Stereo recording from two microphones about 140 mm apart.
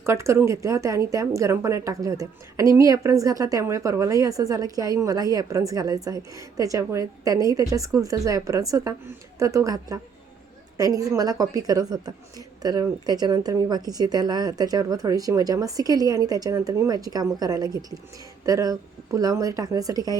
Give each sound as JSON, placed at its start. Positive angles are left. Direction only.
{"t": 0.0, "sound": "speech", "side_deg": -20}